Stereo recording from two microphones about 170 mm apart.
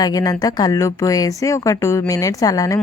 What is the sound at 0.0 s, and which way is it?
A woman's voice, 20° left (ahead or behind).